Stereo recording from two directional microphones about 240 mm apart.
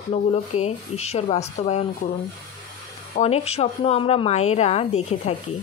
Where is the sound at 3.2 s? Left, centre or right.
Left.